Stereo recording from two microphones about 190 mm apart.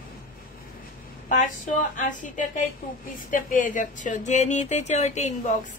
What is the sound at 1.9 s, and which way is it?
A woman's voice, 40° left (ahead or behind).